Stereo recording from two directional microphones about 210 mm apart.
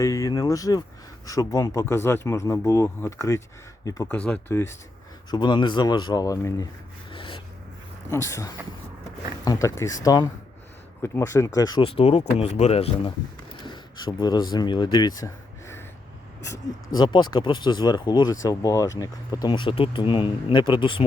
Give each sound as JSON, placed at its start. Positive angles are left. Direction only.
{"t": 0.0, "sound": "speech", "side_deg": 15}
{"t": 7.1, "sound": "rub", "side_deg": 25}
{"t": 8.1, "sound": "speech", "side_deg": 15}
{"t": 13.7, "sound": "a sound", "side_deg": 20}
{"t": 14.5, "sound": "speech", "side_deg": 20}
{"t": 17.0, "sound": "speech", "side_deg": 20}